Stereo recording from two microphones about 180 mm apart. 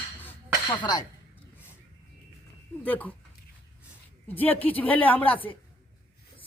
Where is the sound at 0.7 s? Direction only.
20° left (ahead or behind).